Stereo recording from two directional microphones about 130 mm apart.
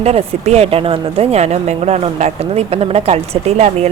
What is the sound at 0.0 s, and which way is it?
A woman's voice, 50° right (ahead or behind).